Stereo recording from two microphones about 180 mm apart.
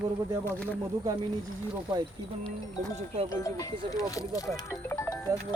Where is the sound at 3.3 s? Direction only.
20° left (ahead or behind).